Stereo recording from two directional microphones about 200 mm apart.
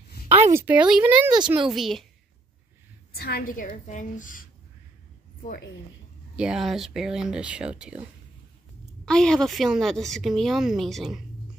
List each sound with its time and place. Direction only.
0.3 s a woman's voice: 10° right (ahead or behind)
3.2 s a woman's voice: 50° left (ahead or behind)
6.3 s a woman's voice: 5° right (ahead or behind)
9.0 s a woman's voice: 5° left (ahead or behind)